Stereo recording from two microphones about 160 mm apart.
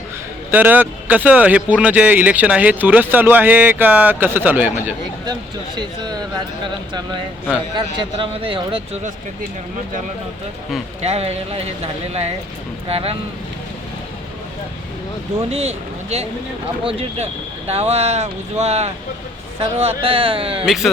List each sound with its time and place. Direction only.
0.5 s speech: 10° right (ahead or behind)
5.2 s speech: 25° right (ahead or behind)
7.8 s speech: 30° right (ahead or behind)
11.0 s speech: 40° right (ahead or behind)
12.9 s speech: 35° right (ahead or behind)
15.5 s speech: 40° right (ahead or behind)
20.7 s speech: centre (ahead or behind)